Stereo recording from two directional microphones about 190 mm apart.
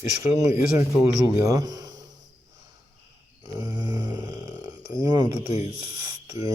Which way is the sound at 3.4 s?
20° right (ahead or behind).